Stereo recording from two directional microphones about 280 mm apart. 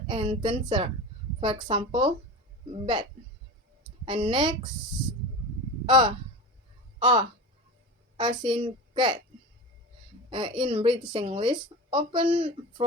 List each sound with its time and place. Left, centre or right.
0.1 s a woman's voice: centre
5.8 s a woman's voice: centre
10.2 s a woman's voice: centre